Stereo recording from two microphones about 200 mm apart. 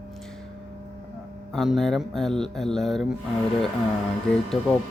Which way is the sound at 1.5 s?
Centre (ahead or behind).